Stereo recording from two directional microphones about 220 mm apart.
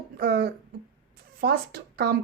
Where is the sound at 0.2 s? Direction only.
45° right (ahead or behind).